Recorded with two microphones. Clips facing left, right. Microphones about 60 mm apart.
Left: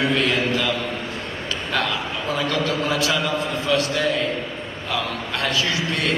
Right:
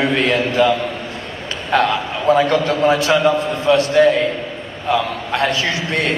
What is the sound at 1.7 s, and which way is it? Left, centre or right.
A man's voice, right.